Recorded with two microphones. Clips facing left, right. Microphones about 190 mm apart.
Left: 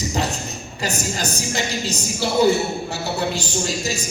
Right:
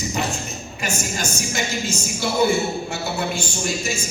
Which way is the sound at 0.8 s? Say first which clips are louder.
Left 2 dB; 35° left (ahead or behind).